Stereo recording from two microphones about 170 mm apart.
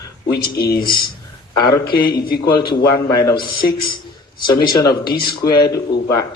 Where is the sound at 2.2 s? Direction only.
60° left (ahead or behind).